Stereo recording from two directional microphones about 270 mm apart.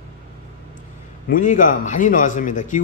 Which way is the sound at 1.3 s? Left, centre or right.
Left.